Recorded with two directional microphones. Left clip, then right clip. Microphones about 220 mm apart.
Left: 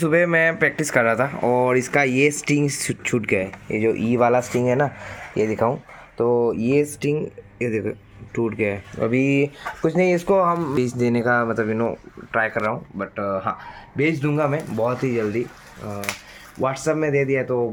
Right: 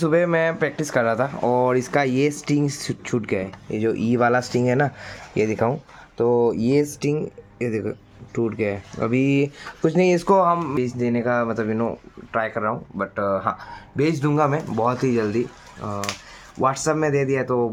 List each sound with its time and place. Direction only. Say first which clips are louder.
0.0 s speech: left 2 dB; centre (ahead or behind)
3.8 s speech: left 2 dB; 10° right (ahead or behind); by 10.4 s 25° right (ahead or behind)
10.4 s speech: right 1 dB; 5° right (ahead or behind)
10.8 s speech: left 2 dB; 10° left (ahead or behind)
13.0 s speech: right 5 dB; 15° right (ahead or behind)